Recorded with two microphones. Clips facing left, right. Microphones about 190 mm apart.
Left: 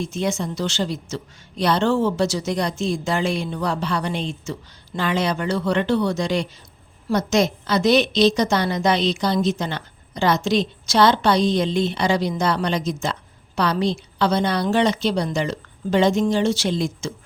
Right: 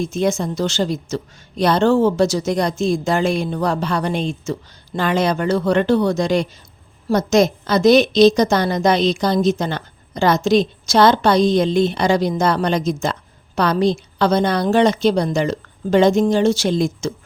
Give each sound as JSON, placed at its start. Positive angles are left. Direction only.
{"t": 0.0, "sound": "a woman's voice", "side_deg": -45}